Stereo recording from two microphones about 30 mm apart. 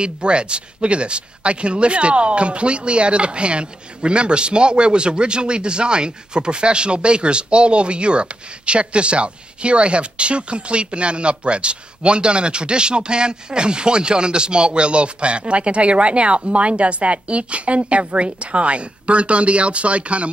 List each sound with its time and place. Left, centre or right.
0.0 s speech: right